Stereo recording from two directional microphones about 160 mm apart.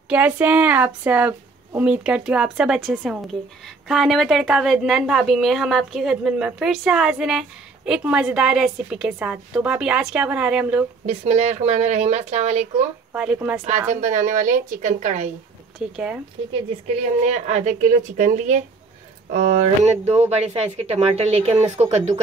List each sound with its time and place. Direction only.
0.1 s a woman's voice: 10° right (ahead or behind)
11.1 s speech: 45° right (ahead or behind)
13.1 s speech: 10° right (ahead or behind)
14.0 s speech: 50° right (ahead or behind)
15.8 s a woman's voice: 5° right (ahead or behind)
16.8 s speech: 45° right (ahead or behind)